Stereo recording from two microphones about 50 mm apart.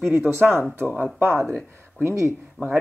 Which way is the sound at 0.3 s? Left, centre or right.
Right.